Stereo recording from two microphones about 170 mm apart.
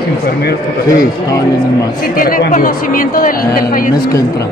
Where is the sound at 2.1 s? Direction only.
55° left (ahead or behind).